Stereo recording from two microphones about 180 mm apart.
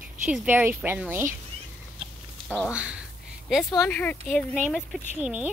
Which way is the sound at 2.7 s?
5° right (ahead or behind).